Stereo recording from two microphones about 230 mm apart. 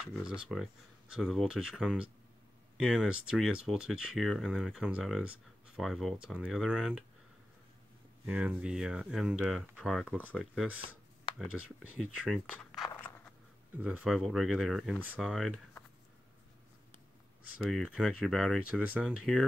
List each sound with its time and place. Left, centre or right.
0.0 s speech: centre
8.3 s speech: centre
11.3 s a sound: left
12.2 s speech: centre
17.6 s speech: centre